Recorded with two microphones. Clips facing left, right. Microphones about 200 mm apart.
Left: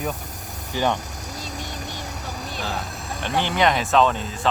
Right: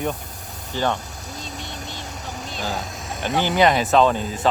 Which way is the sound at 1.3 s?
40° left (ahead or behind).